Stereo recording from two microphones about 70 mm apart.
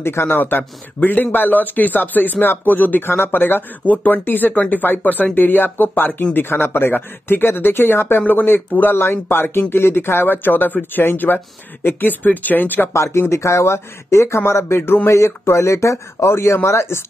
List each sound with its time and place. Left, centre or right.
0.0 s speech: left
12.9 s speech: left